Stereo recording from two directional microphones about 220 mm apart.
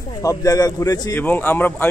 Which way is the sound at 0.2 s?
15° left (ahead or behind).